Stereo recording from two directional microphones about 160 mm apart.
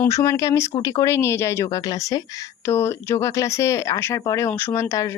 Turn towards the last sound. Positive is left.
turn(degrees=20)  # may be behind; listen again after turning